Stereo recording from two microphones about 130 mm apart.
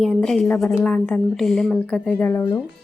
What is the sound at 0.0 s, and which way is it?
A woman's voice, 5° left (ahead or behind).